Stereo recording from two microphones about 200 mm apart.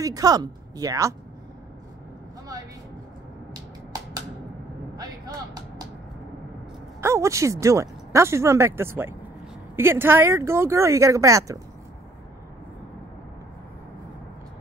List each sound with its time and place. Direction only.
0.0 s speech: 20° right (ahead or behind)
4.9 s vehicle: 20° right (ahead or behind)
7.0 s speech: 15° right (ahead or behind)